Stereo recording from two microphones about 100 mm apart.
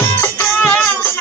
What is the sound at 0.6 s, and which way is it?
Music, 15° left (ahead or behind).